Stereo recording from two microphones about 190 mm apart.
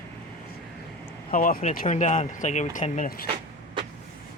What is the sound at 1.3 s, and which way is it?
Speech, 45° left (ahead or behind).